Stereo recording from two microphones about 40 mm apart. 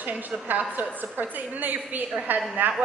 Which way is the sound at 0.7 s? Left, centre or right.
Right.